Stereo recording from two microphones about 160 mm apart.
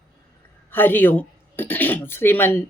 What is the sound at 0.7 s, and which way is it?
Speech, 10° left (ahead or behind).